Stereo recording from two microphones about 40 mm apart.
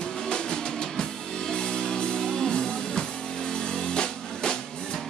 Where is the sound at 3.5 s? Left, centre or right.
Centre.